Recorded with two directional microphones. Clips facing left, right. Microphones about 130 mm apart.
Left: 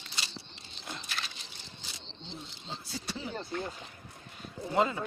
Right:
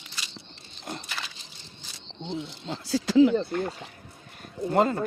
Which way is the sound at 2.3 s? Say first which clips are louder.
Right 11 dB; 90° right.